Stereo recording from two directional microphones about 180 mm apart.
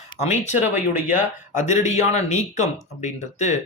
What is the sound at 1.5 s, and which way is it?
Speech, 40° left (ahead or behind).